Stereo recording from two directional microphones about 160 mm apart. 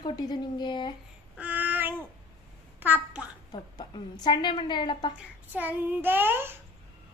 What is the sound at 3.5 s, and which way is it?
A woman's voice, 30° left (ahead or behind).